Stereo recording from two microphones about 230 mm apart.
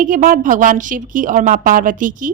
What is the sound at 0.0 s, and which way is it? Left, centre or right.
A woman's voice, right.